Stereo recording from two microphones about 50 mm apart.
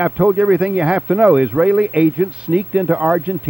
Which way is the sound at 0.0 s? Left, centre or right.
Right.